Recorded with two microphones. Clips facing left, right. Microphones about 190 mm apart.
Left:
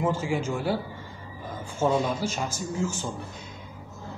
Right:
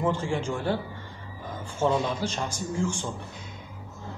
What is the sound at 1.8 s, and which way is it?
A man's voice, 10° left (ahead or behind).